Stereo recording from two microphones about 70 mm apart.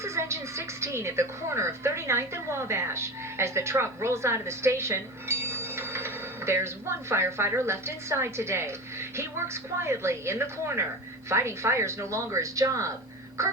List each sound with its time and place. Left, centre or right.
0.0 s a woman's voice: right